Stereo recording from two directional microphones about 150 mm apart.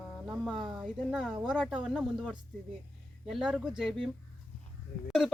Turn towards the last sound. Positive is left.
turn(degrees=0)  # may be behind; listen again after turning